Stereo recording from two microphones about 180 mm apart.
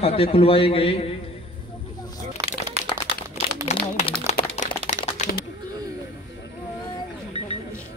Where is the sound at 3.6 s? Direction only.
40° left (ahead or behind).